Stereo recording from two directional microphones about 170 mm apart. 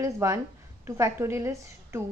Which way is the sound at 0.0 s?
15° right (ahead or behind).